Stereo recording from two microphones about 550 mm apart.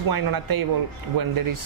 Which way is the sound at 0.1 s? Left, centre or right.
Right.